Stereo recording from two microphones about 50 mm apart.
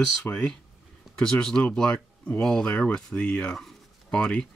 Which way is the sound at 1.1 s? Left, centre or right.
Centre.